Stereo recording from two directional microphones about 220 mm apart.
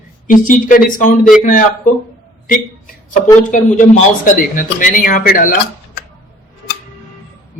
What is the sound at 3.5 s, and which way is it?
A man's voice, 35° left (ahead or behind).